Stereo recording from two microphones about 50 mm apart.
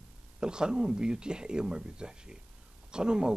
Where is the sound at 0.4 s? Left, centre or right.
Centre.